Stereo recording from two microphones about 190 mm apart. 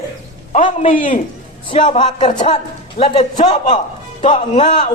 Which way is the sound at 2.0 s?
25° left (ahead or behind).